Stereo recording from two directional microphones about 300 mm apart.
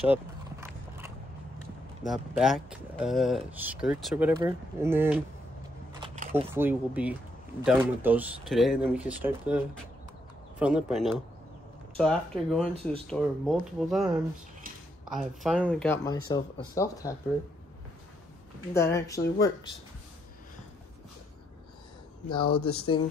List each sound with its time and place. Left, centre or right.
0.1 s a sound: centre
2.0 s speech: centre
5.9 s a sound: centre
6.5 s speech: centre
10.6 s speech: centre
15.4 s speech: centre
18.7 s speech: centre
22.4 s speech: left